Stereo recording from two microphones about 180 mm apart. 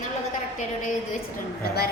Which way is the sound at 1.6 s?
60° left (ahead or behind).